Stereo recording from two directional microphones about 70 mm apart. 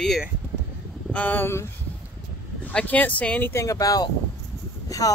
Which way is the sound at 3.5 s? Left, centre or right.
Left.